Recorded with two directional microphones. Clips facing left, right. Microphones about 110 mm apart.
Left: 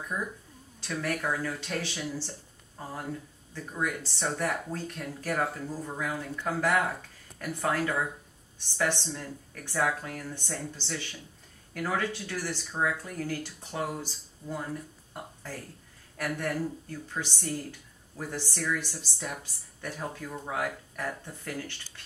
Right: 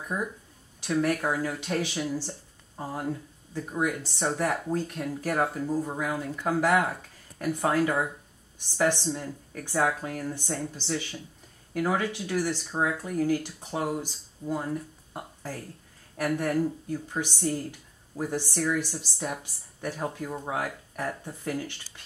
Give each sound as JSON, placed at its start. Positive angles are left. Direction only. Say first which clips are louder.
{"t": 0.1, "sound": "speech", "louder": "right 4 dB", "side_deg": -25}
{"t": 3.5, "sound": "speech", "louder": "right 4 dB", "side_deg": -15}